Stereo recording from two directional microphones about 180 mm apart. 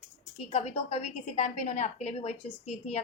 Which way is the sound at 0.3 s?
35° left (ahead or behind).